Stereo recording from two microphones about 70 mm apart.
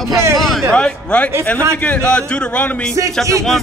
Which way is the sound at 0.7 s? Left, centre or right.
Centre.